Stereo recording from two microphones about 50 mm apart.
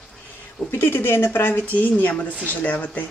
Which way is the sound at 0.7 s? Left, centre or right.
Left.